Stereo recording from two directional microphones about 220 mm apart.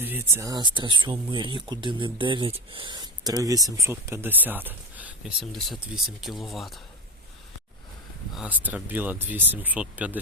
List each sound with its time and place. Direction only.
0.0 s speech: 10° right (ahead or behind)
8.4 s speech: 5° right (ahead or behind)